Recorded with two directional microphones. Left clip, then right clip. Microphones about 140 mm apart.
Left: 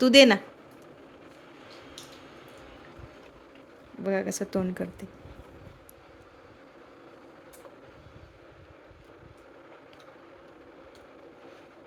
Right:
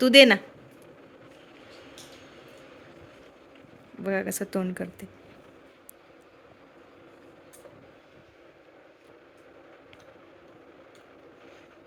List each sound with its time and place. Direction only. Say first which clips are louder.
0.0 s speech: right 2 dB; 20° left (ahead or behind)
4.0 s speech: even; 15° left (ahead or behind)